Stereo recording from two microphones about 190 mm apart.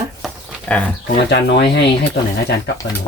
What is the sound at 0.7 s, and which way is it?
Speech, 5° left (ahead or behind).